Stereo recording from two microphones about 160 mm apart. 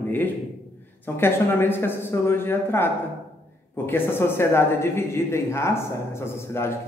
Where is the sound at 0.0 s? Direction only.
10° left (ahead or behind).